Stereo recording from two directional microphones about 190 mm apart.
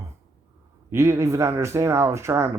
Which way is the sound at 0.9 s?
15° right (ahead or behind).